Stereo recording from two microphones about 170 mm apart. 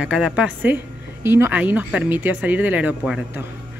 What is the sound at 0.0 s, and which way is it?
Speech, 5° right (ahead or behind).